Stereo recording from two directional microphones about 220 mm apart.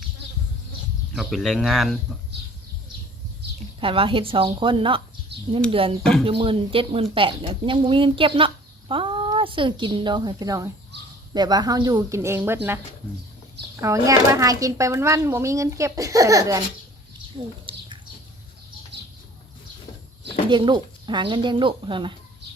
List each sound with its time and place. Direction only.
1.1 s speech: centre (ahead or behind)
3.8 s speech: 25° right (ahead or behind)
5.3 s a sound: 50° right (ahead or behind)
6.0 s speech: 5° left (ahead or behind)
6.2 s speech: 25° right (ahead or behind)
13.8 s speech: 15° right (ahead or behind)
17.3 s a sound: 25° right (ahead or behind)
20.5 s speech: 20° right (ahead or behind)